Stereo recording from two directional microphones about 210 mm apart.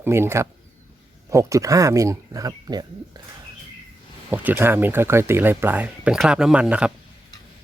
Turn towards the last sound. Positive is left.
turn(degrees=-5)  # may be behind; listen again after turning